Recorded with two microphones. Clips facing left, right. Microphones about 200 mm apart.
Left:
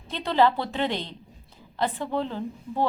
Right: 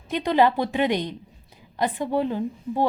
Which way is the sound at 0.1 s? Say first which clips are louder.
Right 2 dB; 15° right (ahead or behind).